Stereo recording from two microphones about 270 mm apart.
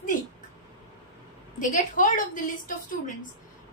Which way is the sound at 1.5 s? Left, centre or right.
Left.